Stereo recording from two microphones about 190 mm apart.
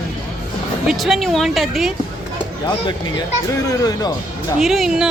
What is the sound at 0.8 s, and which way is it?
Speech, centre (ahead or behind).